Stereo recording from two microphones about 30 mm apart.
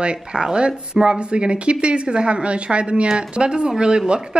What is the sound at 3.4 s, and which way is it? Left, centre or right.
Speech, right.